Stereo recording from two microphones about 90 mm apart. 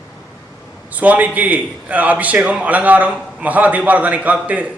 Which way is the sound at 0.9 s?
20° right (ahead or behind).